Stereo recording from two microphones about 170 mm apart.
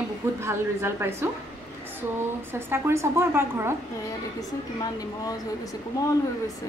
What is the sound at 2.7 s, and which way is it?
A woman's voice, 15° right (ahead or behind).